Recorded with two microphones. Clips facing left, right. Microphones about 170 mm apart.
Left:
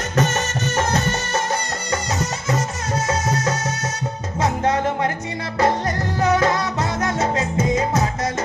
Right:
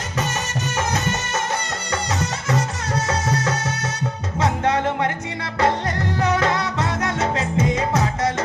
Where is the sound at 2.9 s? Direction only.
35° right (ahead or behind).